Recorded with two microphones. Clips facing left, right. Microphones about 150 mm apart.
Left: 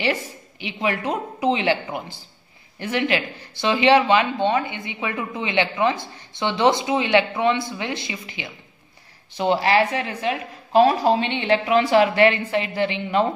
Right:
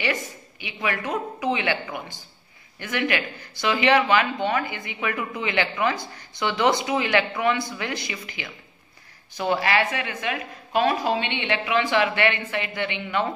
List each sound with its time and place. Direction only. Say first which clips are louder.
0.0 s a woman's voice: left 3 dB; 30° left (ahead or behind)